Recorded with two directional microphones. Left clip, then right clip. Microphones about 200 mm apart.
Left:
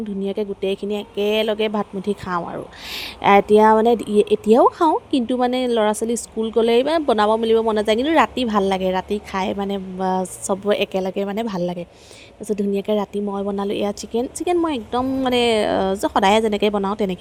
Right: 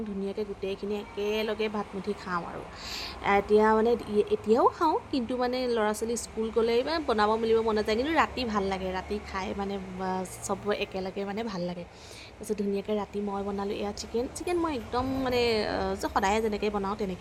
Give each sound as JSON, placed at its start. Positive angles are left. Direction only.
{"t": 0.3, "sound": "speech", "side_deg": 35}